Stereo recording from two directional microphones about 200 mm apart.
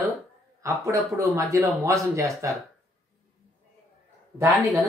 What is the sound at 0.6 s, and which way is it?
A man's voice, 15° right (ahead or behind).